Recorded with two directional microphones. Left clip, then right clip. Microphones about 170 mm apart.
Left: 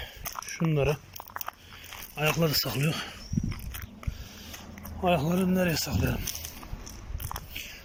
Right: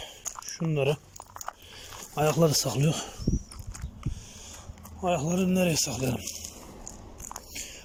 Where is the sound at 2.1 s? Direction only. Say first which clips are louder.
Right 3 dB; 20° right (ahead or behind).